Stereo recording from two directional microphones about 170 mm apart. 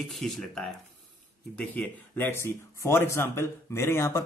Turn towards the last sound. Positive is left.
turn(degrees=15)  # may be behind; listen again after turning